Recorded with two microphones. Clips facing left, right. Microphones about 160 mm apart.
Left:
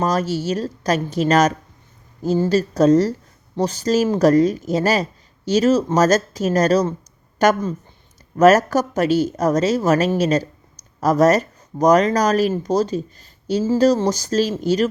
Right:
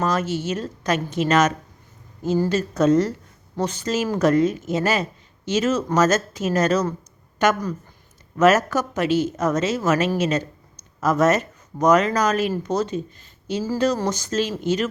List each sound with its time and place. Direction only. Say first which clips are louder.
0.0 s speech: left 3 dB; 35° left (ahead or behind)